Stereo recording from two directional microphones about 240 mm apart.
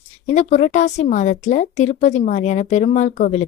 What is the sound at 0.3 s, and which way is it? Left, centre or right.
A woman's voice, left.